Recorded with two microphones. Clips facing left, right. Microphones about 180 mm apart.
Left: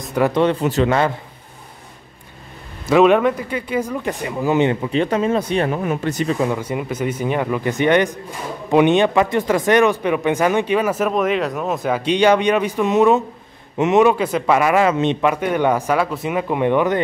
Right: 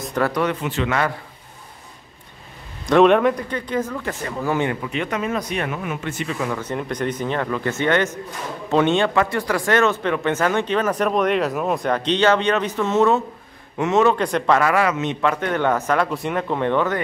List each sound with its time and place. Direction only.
0.3 s a man's voice: 30° left (ahead or behind)
2.9 s speech: 5° left (ahead or behind); by 6.5 s 35° left (ahead or behind)
6.5 s speech: 10° left (ahead or behind)
14.1 s speech: 5° left (ahead or behind); by 15.1 s 25° left (ahead or behind)
15.2 s speech: 10° left (ahead or behind)